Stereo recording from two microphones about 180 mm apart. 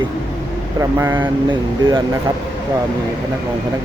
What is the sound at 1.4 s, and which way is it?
Speech, 25° right (ahead or behind).